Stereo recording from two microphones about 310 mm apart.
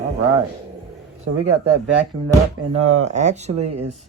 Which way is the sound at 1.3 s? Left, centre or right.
Right.